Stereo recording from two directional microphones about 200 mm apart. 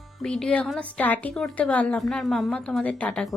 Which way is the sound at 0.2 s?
5° left (ahead or behind).